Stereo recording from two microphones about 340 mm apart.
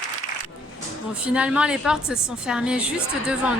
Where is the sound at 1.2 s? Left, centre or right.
Centre.